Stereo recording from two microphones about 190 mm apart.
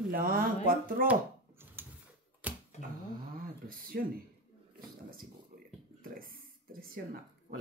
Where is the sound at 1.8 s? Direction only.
10° right (ahead or behind).